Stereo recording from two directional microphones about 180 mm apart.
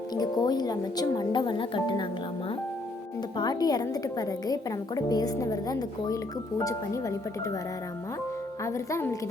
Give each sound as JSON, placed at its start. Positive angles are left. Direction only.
{"t": 0.1, "sound": "a woman's voice", "side_deg": 20}
{"t": 3.3, "sound": "a woman's voice", "side_deg": 20}
{"t": 8.6, "sound": "speech", "side_deg": 15}